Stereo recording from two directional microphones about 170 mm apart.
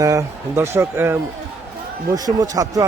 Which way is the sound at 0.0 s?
20° right (ahead or behind).